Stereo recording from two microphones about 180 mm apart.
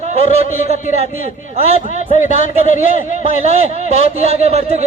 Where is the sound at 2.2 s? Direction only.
45° left (ahead or behind).